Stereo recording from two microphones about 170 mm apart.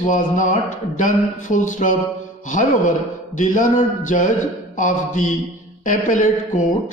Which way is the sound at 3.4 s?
50° left (ahead or behind).